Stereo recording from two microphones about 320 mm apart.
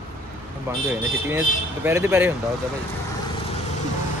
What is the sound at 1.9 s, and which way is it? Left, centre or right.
Speech, centre.